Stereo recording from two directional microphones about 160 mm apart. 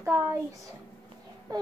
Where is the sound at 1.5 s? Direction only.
25° right (ahead or behind).